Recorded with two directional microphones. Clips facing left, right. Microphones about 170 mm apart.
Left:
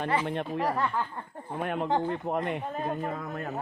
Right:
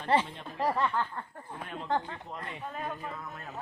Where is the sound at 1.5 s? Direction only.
65° left (ahead or behind).